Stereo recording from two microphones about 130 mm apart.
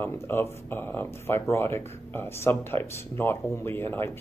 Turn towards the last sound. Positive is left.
turn(degrees=15)  # may be behind; listen again after turning